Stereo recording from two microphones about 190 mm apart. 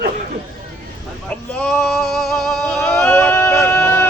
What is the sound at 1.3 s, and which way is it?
Male singing, 5° left (ahead or behind).